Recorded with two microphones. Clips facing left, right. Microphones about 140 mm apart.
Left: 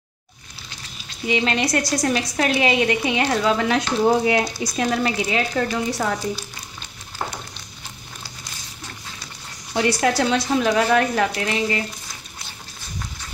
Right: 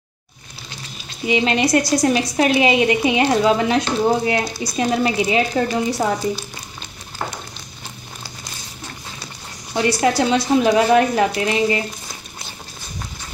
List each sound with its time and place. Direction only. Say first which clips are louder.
1.2 s a woman's voice: right 3 dB; 10° right (ahead or behind)
4.7 s a woman's voice: right 3 dB; 10° right (ahead or behind)
9.9 s a woman's voice: right 3 dB; 5° right (ahead or behind)